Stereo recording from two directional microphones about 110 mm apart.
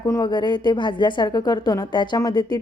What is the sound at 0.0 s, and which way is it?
A woman's voice, 40° left (ahead or behind).